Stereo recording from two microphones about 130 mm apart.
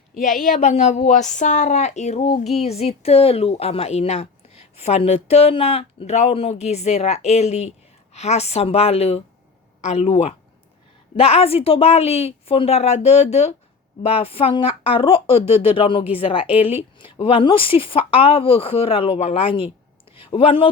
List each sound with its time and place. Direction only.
0.4 s speech: 70° left (ahead or behind); by 20.7 s 45° left (ahead or behind)